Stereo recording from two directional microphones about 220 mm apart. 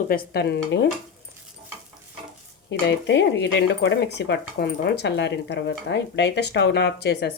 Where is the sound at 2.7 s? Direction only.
50° left (ahead or behind).